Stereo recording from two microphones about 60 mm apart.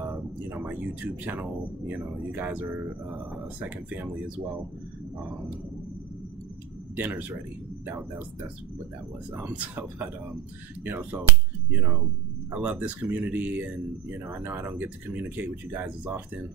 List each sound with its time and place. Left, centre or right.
0.0 s speech: right
7.0 s speech: right
9.3 s speech: right
9.8 s speech: right
14.2 s speech: right
14.8 s speech: right